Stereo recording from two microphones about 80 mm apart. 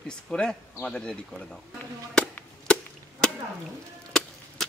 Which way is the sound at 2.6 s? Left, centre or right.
Centre.